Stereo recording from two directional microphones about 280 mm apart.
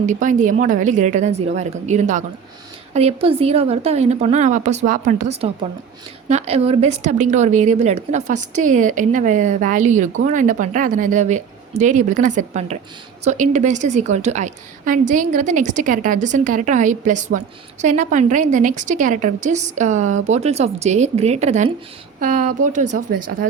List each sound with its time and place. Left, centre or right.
0.0 s a woman's voice: right